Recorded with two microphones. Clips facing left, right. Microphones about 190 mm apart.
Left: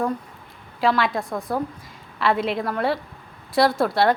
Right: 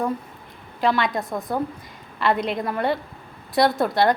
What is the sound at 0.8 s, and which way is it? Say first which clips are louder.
A woman's voice: left 1 dB; centre (ahead or behind).